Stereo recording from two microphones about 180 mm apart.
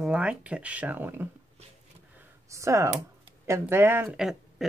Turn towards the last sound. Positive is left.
turn(degrees=0)  # may be behind; listen again after turning